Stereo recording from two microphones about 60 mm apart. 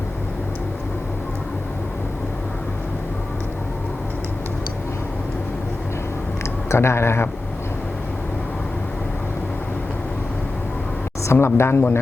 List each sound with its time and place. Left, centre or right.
6.7 s speech: left
11.2 s speech: left